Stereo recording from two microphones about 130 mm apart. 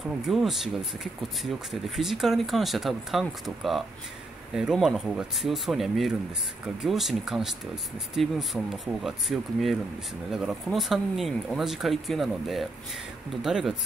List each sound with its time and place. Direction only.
0.3 s speech: centre (ahead or behind)